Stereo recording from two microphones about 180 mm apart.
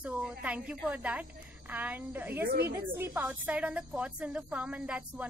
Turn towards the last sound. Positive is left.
turn(degrees=-5)  # may be behind; listen again after turning